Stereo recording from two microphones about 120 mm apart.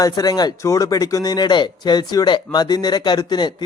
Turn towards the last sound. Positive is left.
turn(degrees=35)  # may be behind; listen again after turning